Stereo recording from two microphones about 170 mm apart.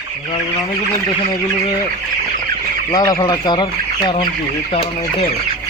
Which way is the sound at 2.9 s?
20° left (ahead or behind).